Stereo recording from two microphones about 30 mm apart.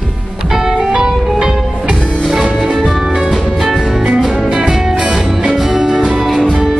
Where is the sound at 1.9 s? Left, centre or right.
Left.